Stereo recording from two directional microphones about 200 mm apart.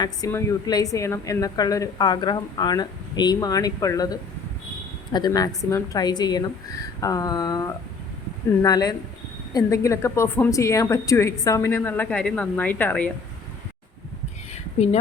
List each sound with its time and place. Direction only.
0.0 s a woman's voice: 15° left (ahead or behind)